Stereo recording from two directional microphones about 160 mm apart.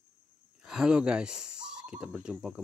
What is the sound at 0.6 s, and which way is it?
Speech, 5° right (ahead or behind).